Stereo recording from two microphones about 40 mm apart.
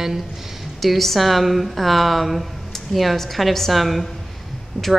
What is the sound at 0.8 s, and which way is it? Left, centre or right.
Speech, centre.